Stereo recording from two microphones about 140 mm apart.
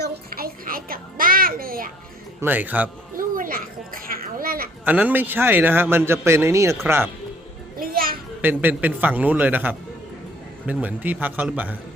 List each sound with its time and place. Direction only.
0.3 s music: 90° right
2.4 s a man's voice: 15° right (ahead or behind)
3.2 s children playing: 90° right
4.9 s a man's voice: 10° right (ahead or behind)
7.8 s music: 90° right
8.4 s a man's voice: 15° right (ahead or behind)